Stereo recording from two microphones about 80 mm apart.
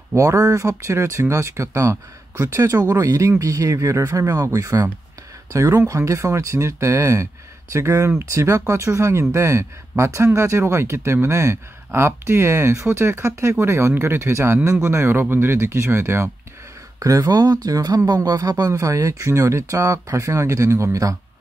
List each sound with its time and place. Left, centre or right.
0.1 s speech: right
17.0 s speech: right